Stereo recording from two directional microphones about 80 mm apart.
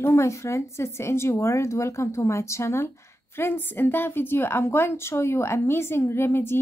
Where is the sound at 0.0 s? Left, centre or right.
Left.